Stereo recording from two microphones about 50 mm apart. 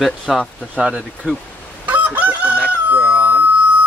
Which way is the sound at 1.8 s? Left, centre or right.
Right.